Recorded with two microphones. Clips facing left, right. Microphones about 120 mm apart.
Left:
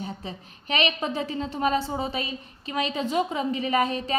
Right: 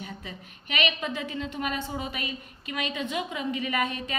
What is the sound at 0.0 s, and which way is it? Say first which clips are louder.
A woman's voice: left 5 dB; 30° left (ahead or behind).